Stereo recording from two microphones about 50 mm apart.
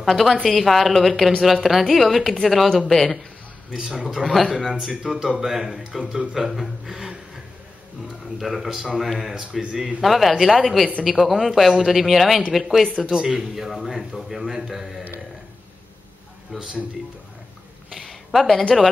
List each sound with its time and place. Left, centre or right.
0.0 s a woman's voice: centre
3.7 s speech: centre
4.1 s a woman's voice: centre
4.6 s speech: centre
6.3 s speech: centre
8.4 s a woman's voice: centre
10.0 s a woman's voice: centre
13.1 s a woman's voice: centre
16.5 s speech: centre
17.9 s a sound: centre